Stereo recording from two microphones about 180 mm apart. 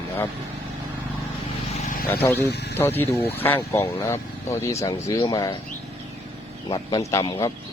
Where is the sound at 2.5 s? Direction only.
70° left (ahead or behind).